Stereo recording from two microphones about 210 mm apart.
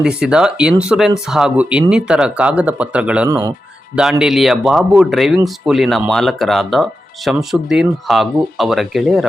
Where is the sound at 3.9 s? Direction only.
5° right (ahead or behind).